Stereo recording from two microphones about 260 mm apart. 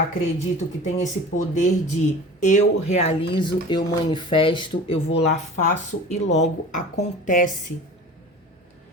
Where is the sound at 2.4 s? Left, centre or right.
Left.